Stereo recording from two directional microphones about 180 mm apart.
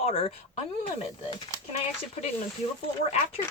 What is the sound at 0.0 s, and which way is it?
Speech, 35° left (ahead or behind).